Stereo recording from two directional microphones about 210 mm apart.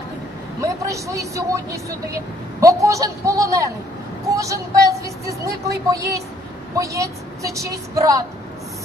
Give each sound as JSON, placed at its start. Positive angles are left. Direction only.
{"t": 0.6, "sound": "speech", "side_deg": -15}